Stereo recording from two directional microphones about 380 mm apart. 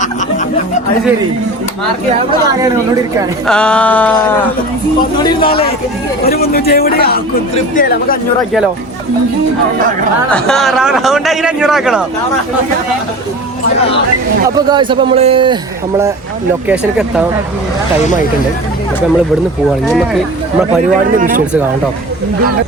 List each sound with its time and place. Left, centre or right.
3.2 s a man's voice: centre
5.4 s a man's voice: centre
10.3 s a man's voice: centre
14.7 s speech: centre
16.6 s a man's voice: centre
21.2 s speech: right